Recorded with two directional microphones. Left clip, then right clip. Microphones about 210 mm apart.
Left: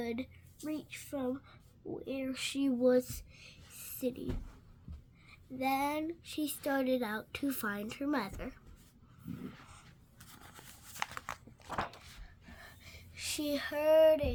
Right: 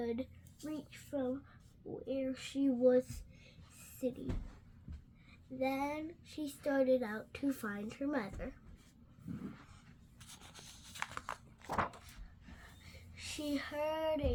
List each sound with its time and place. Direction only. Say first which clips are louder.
0.0 s speech: even; 45° left (ahead or behind)
5.5 s speech: left 4 dB; 35° left (ahead or behind)
10.4 s a sound: left 2 dB; centre (ahead or behind)
11.0 s biting: left 3 dB; 25° left (ahead or behind)
12.8 s child singing: left 6 dB; 45° left (ahead or behind)